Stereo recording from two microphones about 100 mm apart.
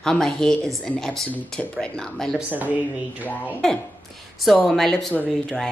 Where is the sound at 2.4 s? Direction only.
15° right (ahead or behind).